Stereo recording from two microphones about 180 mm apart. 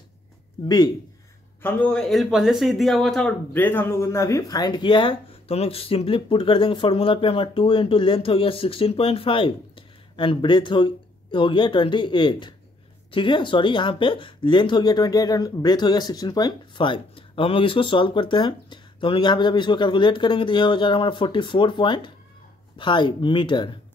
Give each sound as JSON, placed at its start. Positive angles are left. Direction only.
{"t": 0.7, "sound": "speech", "side_deg": 20}
{"t": 1.6, "sound": "speech", "side_deg": 10}